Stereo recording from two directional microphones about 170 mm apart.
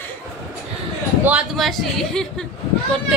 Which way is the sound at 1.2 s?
5° right (ahead or behind).